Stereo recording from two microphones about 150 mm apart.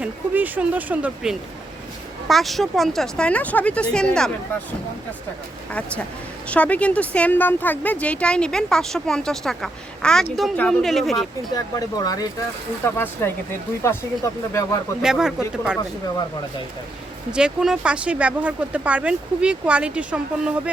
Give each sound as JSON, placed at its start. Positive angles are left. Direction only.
{"t": 0.0, "sound": "a woman's voice", "side_deg": -10}
{"t": 6.5, "sound": "a woman's voice", "side_deg": 10}
{"t": 11.5, "sound": "speech", "side_deg": 25}
{"t": 12.8, "sound": "speech", "side_deg": 15}
{"t": 14.5, "sound": "speech", "side_deg": 20}
{"t": 15.0, "sound": "a woman's voice", "side_deg": -5}
{"t": 17.3, "sound": "speech", "side_deg": -5}